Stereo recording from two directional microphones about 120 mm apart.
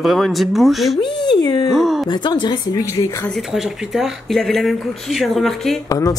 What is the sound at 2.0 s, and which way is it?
Speech, 40° left (ahead or behind).